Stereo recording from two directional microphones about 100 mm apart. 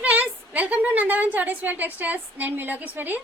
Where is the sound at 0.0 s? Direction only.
15° right (ahead or behind).